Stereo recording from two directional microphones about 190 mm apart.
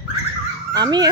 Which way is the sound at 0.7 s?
20° right (ahead or behind).